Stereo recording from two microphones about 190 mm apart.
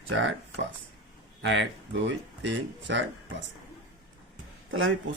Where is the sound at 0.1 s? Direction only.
85° right.